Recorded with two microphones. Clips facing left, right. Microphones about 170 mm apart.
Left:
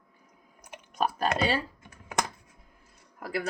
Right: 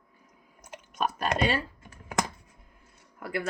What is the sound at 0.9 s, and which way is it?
Drip, 35° left (ahead or behind).